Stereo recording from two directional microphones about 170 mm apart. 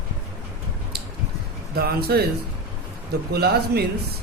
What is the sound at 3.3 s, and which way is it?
Speech, 70° right (ahead or behind).